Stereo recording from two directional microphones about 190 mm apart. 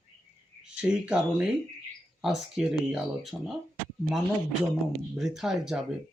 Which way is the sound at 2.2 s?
Centre (ahead or behind).